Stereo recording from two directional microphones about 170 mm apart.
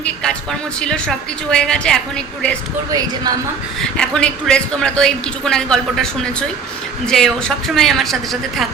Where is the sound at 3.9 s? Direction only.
5° left (ahead or behind).